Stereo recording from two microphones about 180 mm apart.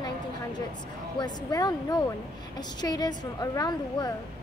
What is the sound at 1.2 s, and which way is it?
A woman's voice, 20° left (ahead or behind).